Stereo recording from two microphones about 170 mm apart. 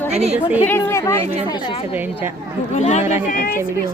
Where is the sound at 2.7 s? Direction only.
40° left (ahead or behind).